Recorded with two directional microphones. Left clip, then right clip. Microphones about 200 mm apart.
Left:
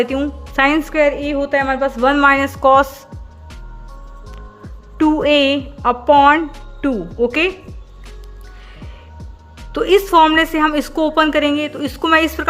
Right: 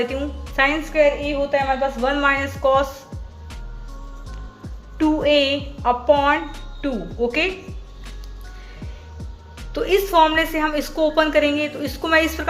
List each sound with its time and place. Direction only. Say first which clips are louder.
0.0 s a woman's voice: left 6 dB; 40° left (ahead or behind)
5.1 s speech: left 3 dB; 40° left (ahead or behind)
7.5 s music: right 1 dB; centre (ahead or behind)
9.7 s speech: left 5 dB; 35° left (ahead or behind)